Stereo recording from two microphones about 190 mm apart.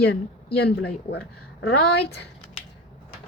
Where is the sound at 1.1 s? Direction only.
60° left (ahead or behind).